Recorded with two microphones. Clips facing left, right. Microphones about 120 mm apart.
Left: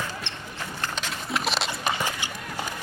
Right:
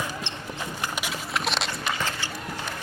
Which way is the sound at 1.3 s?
Centre (ahead or behind).